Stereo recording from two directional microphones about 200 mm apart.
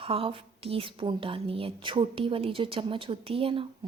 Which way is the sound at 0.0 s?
30° right (ahead or behind).